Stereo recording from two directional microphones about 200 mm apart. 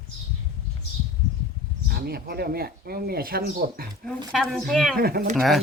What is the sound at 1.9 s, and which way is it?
Speech, 50° right (ahead or behind).